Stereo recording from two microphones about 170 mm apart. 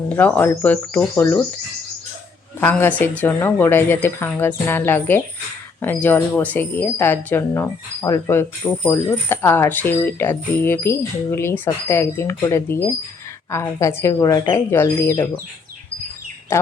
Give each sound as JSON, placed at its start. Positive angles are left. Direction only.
{"t": 0.1, "sound": "speech", "side_deg": 10}
{"t": 2.6, "sound": "speech", "side_deg": 10}
{"t": 16.5, "sound": "speech", "side_deg": 15}